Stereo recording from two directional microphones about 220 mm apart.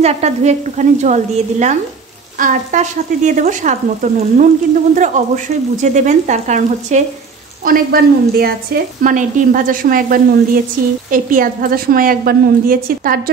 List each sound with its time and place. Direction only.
0.0 s a woman's voice: 30° right (ahead or behind)